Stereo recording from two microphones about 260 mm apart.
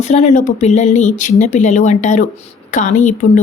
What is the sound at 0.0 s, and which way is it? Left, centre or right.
A woman's voice, left.